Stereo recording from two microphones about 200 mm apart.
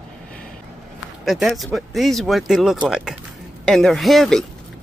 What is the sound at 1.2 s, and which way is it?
Speech, centre (ahead or behind).